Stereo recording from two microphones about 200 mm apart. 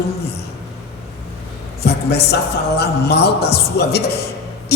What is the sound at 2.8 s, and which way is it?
A woman's voice, 55° left (ahead or behind).